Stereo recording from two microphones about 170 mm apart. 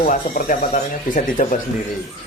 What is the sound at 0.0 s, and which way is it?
Speech, 50° left (ahead or behind).